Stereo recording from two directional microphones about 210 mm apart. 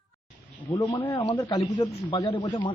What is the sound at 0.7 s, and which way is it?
Speech, 15° left (ahead or behind).